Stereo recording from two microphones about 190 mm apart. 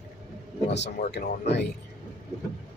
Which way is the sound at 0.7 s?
60° left (ahead or behind).